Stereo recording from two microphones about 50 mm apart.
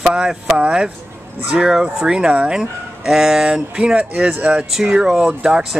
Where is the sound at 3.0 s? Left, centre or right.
Centre.